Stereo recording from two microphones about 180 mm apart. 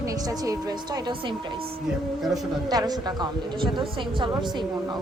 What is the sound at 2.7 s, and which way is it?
Speech, 20° right (ahead or behind).